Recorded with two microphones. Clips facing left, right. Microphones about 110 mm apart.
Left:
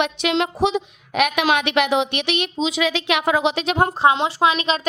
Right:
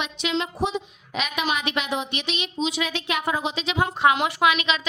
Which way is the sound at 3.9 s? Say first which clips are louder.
Left 3 dB; 30° left (ahead or behind).